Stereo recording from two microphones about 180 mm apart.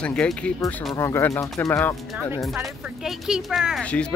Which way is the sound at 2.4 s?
Centre (ahead or behind).